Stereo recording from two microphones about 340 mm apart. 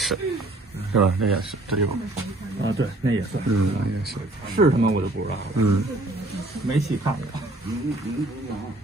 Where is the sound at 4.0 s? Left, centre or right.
Right.